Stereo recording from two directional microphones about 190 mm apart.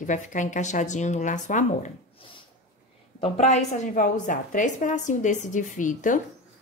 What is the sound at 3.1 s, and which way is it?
A woman's voice, 35° left (ahead or behind).